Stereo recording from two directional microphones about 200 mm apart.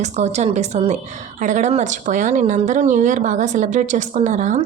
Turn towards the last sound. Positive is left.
turn(degrees=-40)  # may be behind; listen again after turning